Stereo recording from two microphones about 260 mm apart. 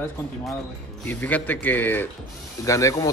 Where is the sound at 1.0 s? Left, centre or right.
Centre.